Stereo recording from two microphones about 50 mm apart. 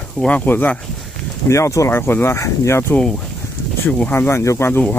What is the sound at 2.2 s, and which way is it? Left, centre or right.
Speech, left.